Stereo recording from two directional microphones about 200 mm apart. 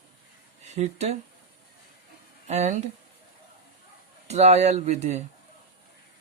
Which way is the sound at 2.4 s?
35° right (ahead or behind).